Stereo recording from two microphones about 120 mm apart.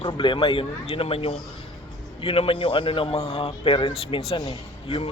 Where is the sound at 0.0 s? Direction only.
45° left (ahead or behind).